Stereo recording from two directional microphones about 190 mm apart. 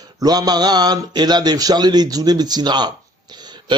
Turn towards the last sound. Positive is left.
turn(degrees=-20)  # may be behind; listen again after turning